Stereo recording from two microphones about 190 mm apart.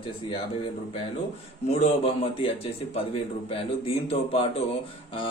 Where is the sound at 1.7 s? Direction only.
30° left (ahead or behind).